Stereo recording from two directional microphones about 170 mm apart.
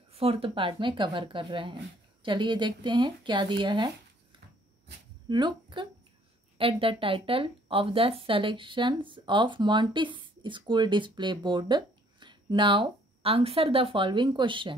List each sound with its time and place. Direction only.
0.1 s speech: 35° right (ahead or behind)
5.3 s speech: 25° right (ahead or behind)